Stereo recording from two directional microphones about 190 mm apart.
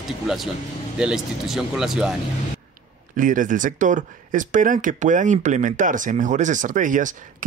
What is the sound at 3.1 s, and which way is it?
Speech, 45° right (ahead or behind).